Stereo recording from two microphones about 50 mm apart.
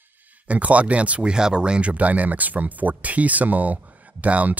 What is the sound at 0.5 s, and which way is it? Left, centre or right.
Speech, right.